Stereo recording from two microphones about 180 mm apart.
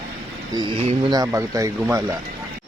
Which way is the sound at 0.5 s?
25° right (ahead or behind).